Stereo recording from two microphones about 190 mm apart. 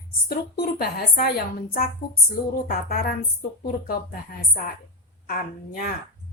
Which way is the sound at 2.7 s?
50° left (ahead or behind).